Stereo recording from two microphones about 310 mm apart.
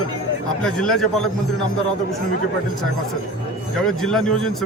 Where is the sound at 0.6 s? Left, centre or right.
Centre.